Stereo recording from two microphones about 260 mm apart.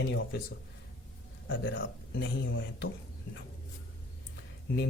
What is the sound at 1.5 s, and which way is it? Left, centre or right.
Speech, left.